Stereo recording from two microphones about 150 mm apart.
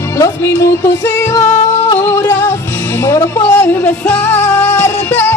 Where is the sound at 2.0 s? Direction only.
15° left (ahead or behind).